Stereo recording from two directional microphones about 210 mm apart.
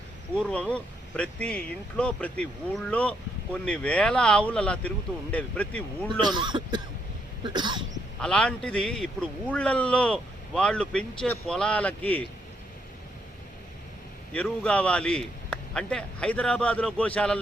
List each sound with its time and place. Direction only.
0.5 s speech: 5° left (ahead or behind)
6.2 s speech: 20° right (ahead or behind)
7.4 s cough: 20° right (ahead or behind)
8.2 s speech: 5° left (ahead or behind)
14.3 s speech: 5° left (ahead or behind)